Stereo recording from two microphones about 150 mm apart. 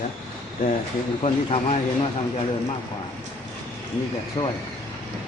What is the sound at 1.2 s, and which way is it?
Speech, 40° left (ahead or behind).